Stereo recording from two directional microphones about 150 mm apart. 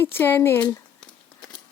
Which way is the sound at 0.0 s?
15° left (ahead or behind).